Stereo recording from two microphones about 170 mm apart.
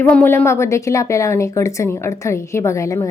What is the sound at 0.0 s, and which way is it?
A woman's voice, 10° left (ahead or behind).